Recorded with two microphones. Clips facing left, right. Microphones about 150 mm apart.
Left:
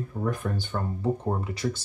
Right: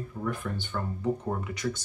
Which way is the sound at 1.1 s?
30° left (ahead or behind).